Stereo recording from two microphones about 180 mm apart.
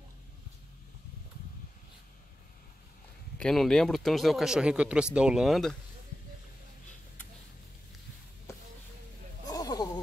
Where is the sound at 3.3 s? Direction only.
5° left (ahead or behind).